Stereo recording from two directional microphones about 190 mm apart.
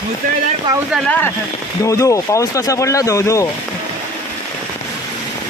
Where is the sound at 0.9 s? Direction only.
5° left (ahead or behind).